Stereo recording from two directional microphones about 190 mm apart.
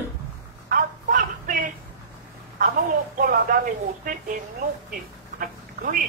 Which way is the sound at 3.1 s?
45° right (ahead or behind).